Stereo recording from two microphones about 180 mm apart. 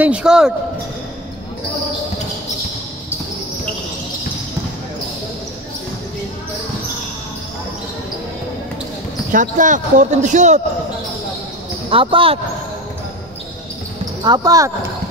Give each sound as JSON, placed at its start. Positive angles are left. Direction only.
{"t": 0.0, "sound": "speech", "side_deg": -5}
{"t": 9.3, "sound": "speech", "side_deg": -45}
{"t": 11.9, "sound": "speech", "side_deg": -30}
{"t": 14.2, "sound": "speech", "side_deg": -20}